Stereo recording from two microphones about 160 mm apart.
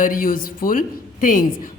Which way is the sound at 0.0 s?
60° left (ahead or behind).